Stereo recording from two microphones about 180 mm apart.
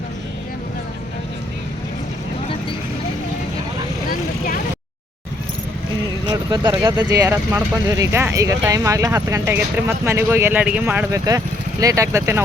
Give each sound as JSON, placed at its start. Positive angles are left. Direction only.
{"t": 6.2, "sound": "speech", "side_deg": -25}
{"t": 7.0, "sound": "speech", "side_deg": -10}